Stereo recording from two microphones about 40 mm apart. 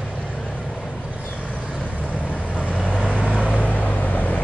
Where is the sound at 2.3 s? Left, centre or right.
Left.